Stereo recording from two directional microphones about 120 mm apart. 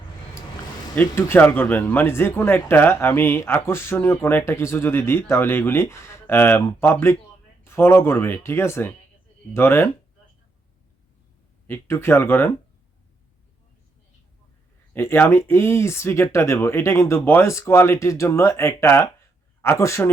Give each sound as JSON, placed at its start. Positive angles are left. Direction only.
{"t": 0.9, "sound": "speech", "side_deg": 15}
{"t": 11.7, "sound": "speech", "side_deg": 20}
{"t": 14.9, "sound": "speech", "side_deg": 20}